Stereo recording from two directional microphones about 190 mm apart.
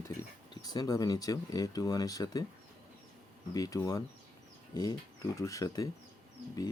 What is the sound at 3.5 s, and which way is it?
Speech, 20° left (ahead or behind).